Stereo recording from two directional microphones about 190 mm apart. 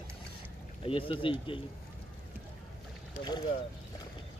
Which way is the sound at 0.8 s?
30° left (ahead or behind).